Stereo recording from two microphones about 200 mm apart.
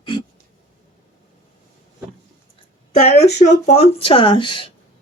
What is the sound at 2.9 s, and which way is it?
Speech, 30° left (ahead or behind).